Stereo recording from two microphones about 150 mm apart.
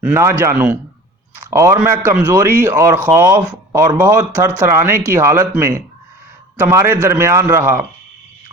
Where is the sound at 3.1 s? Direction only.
15° right (ahead or behind).